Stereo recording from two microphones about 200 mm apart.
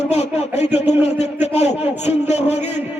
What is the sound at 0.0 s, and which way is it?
Speech, 35° left (ahead or behind).